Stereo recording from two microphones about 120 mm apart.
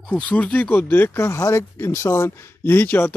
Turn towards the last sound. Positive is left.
turn(degrees=15)  # may be behind; listen again after turning